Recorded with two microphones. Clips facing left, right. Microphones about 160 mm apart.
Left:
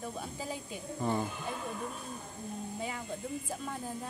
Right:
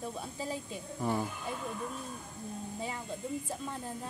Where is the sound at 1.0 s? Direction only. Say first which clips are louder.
Even; 10° right (ahead or behind).